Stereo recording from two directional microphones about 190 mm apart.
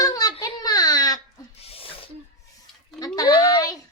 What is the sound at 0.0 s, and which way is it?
Baby cry, 20° left (ahead or behind).